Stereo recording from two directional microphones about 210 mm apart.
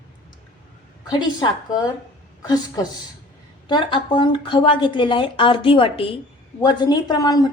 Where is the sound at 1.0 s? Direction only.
20° left (ahead or behind).